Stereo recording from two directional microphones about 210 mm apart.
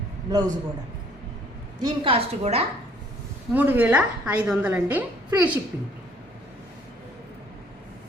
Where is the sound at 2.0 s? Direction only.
30° right (ahead or behind).